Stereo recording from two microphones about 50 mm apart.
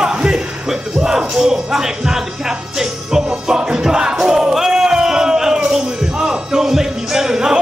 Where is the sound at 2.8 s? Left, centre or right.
Centre.